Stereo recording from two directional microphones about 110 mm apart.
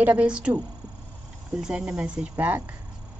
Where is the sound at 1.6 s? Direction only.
5° right (ahead or behind).